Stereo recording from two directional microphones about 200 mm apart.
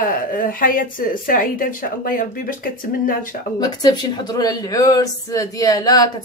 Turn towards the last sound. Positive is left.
turn(degrees=20)  # may be behind; listen again after turning